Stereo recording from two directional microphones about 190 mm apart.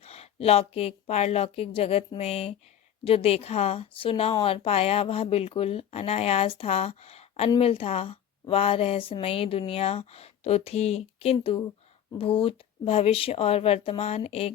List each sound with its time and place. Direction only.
0.0 s a woman's voice: 35° left (ahead or behind)